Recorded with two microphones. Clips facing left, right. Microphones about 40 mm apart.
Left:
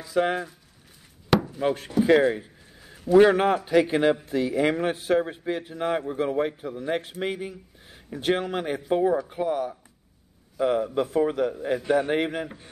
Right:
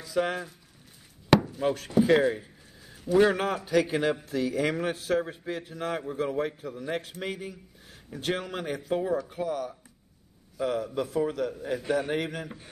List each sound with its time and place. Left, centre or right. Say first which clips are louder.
0.0 s a man's voice: left 4 dB; centre
1.6 s a man's voice: left 2 dB; centre
2.0 s speech: left 3 dB; centre
2.2 s a man's voice: left 3 dB; left